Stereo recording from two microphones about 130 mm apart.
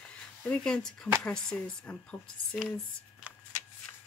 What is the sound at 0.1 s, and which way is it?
Speech, 10° left (ahead or behind).